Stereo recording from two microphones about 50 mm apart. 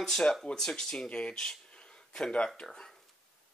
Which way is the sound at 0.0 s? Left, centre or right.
Centre.